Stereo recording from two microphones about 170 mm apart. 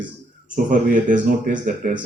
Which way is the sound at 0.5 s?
50° right (ahead or behind).